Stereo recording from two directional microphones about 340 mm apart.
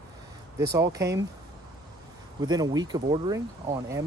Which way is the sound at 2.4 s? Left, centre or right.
Centre.